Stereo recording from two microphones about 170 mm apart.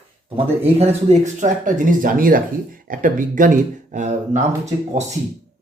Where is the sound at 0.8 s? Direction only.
40° right (ahead or behind).